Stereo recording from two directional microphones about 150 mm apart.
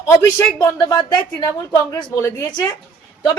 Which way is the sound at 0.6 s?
20° left (ahead or behind).